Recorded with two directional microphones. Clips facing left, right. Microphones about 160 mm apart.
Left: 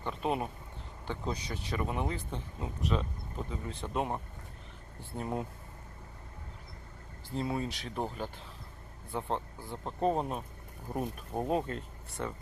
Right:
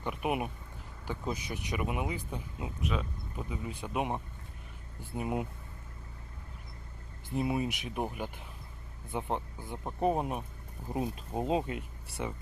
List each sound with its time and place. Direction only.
0.0 s speech: 15° right (ahead or behind)
7.3 s speech: 20° right (ahead or behind)